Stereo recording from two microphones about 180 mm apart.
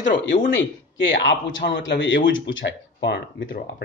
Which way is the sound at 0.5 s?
90° left.